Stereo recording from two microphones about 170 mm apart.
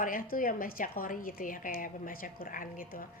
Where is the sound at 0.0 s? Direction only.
55° left (ahead or behind).